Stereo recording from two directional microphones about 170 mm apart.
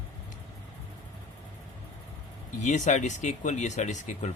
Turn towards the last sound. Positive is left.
turn(degrees=45)  # may be behind; listen again after turning